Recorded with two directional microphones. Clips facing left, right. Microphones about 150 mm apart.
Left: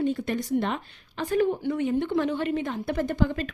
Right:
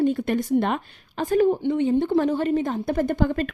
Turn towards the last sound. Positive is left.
turn(degrees=-55)  # may be behind; listen again after turning